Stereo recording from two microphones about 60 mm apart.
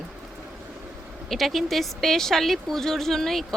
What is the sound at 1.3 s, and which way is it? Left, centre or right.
A woman's voice, centre.